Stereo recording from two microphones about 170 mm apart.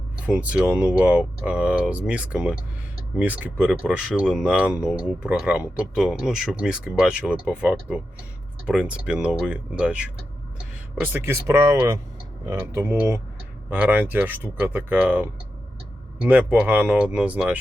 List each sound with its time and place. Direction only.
0.3 s speech: 5° right (ahead or behind)